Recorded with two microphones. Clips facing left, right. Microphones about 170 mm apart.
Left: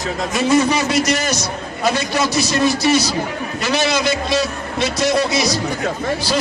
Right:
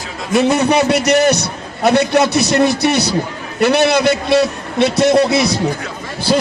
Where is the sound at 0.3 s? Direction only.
65° right (ahead or behind).